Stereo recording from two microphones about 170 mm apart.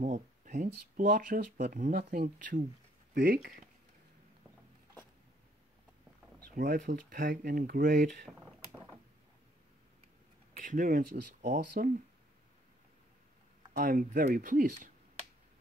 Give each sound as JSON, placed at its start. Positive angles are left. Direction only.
{"t": 0.0, "sound": "speech", "side_deg": -50}
{"t": 6.5, "sound": "speech", "side_deg": -50}
{"t": 8.3, "sound": "a sound", "side_deg": 0}
{"t": 10.6, "sound": "speech", "side_deg": -50}
{"t": 13.7, "sound": "speech", "side_deg": -55}